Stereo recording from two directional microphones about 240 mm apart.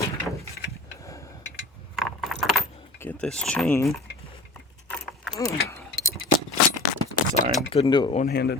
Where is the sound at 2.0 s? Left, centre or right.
Centre.